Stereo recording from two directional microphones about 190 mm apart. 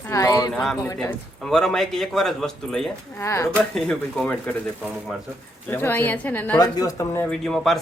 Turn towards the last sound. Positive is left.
turn(degrees=0)  # may be behind; listen again after turning